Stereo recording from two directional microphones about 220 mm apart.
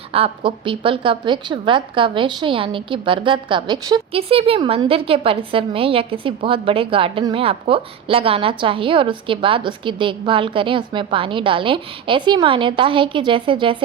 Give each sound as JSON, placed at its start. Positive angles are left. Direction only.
{"t": 0.1, "sound": "a woman's voice", "side_deg": -25}